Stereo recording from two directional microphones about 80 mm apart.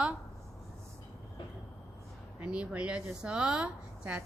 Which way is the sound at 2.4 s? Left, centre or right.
Centre.